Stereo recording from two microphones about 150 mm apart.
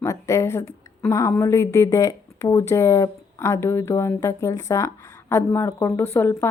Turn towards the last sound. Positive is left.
turn(degrees=15)  # may be behind; listen again after turning